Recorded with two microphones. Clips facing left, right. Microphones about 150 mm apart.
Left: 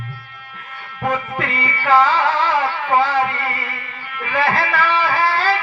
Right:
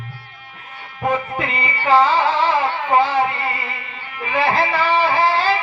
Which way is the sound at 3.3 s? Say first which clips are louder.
Even; 20° right (ahead or behind).